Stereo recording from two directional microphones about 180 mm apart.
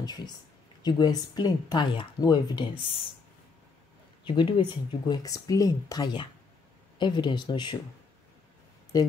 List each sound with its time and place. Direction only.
0.0 s speech: 25° left (ahead or behind)
4.2 s speech: 25° left (ahead or behind)
8.9 s speech: 20° left (ahead or behind)